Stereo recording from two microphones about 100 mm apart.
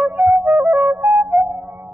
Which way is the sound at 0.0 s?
10° right (ahead or behind).